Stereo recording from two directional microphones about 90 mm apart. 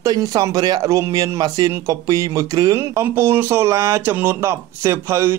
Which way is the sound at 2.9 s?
30° right (ahead or behind).